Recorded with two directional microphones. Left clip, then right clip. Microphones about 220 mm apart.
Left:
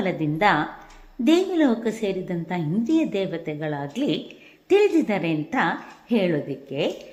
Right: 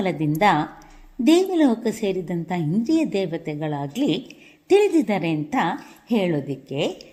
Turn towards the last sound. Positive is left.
turn(degrees=-35)  # may be behind; listen again after turning